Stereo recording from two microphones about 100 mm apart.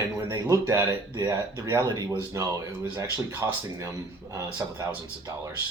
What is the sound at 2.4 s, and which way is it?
Speech, 30° right (ahead or behind).